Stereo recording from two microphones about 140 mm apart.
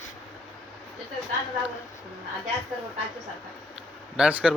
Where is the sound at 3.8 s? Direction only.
5° right (ahead or behind).